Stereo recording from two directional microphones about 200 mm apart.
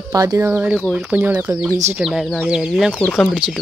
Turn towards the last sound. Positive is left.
turn(degrees=5)  # may be behind; listen again after turning